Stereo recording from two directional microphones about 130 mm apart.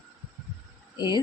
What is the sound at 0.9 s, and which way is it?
Speech, 35° left (ahead or behind).